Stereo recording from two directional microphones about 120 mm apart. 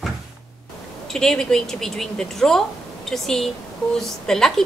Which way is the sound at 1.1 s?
5° left (ahead or behind).